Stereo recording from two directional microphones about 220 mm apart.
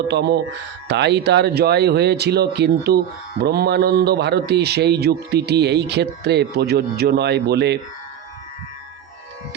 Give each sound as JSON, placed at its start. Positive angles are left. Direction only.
{"t": 0.1, "sound": "speech", "side_deg": -50}